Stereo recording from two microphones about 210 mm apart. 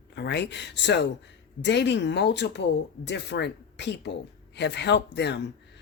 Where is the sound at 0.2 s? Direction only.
55° left (ahead or behind).